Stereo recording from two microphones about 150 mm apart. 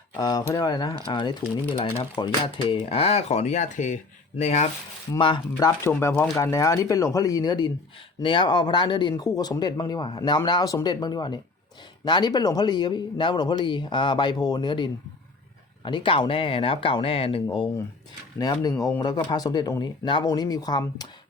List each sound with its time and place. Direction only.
0.2 s speech: 25° left (ahead or behind); by 4.7 s 45° left (ahead or behind)
5.1 s speech: 35° left (ahead or behind)
5.5 s speech: 20° left (ahead or behind)
18.9 s speech: 30° left (ahead or behind)